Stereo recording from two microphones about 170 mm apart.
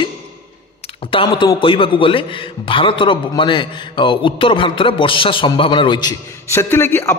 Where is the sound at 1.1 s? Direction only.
25° left (ahead or behind).